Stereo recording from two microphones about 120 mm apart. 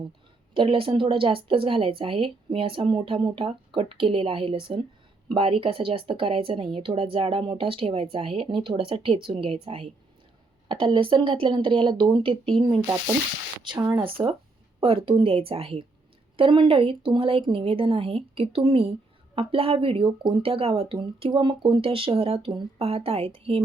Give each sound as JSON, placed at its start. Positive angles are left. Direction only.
{"t": 0.5, "sound": "speech", "side_deg": -45}
{"t": 13.7, "sound": "speech", "side_deg": -25}
{"t": 14.0, "sound": "speech", "side_deg": -45}